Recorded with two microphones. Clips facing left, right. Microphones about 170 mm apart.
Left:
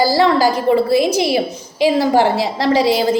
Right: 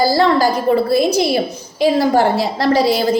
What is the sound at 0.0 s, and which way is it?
A woman's voice, 10° left (ahead or behind).